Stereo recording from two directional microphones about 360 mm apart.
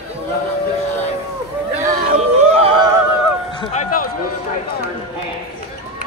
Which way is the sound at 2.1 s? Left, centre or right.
Centre.